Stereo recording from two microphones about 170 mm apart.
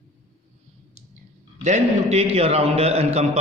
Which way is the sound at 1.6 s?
40° right (ahead or behind).